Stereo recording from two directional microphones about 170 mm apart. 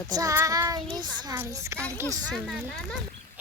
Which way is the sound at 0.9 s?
25° right (ahead or behind).